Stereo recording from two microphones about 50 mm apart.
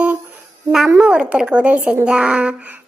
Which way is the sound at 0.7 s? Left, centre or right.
Centre.